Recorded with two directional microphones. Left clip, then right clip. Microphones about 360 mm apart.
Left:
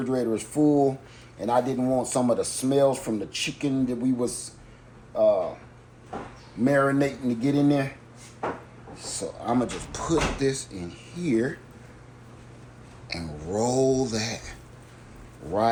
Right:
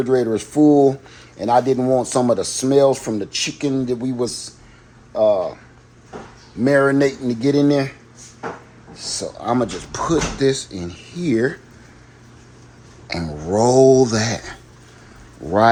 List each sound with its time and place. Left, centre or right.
0.0 s speech: right
6.7 s speech: right
9.0 s speech: right
13.1 s speech: right